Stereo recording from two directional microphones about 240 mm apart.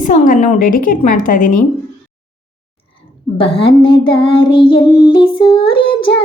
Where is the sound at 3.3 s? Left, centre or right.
Left.